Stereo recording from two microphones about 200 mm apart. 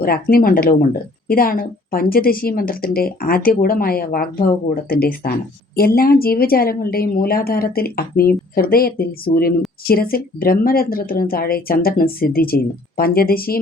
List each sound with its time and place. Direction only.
0.0 s a woman's voice: 50° left (ahead or behind)